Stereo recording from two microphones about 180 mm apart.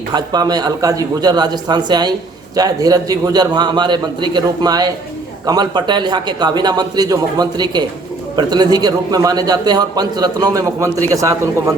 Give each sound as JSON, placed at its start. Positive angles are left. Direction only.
{"t": 0.1, "sound": "a man's voice", "side_deg": -20}